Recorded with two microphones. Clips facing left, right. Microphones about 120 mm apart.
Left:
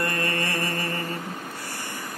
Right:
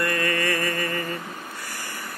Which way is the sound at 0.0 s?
30° left (ahead or behind).